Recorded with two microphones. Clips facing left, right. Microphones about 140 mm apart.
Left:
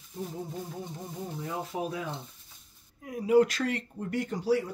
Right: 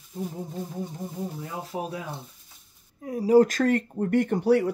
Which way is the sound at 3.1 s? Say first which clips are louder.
Right 4 dB; 35° right (ahead or behind).